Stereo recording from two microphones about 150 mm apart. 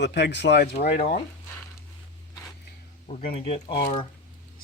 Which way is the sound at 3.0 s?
40° left (ahead or behind).